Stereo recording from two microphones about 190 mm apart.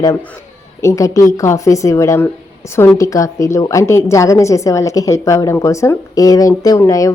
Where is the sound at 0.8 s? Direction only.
15° left (ahead or behind).